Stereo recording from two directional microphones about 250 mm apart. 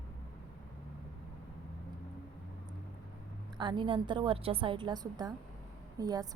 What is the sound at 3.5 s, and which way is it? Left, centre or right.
A woman's voice, centre.